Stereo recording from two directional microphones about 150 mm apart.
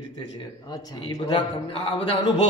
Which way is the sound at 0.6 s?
25° left (ahead or behind).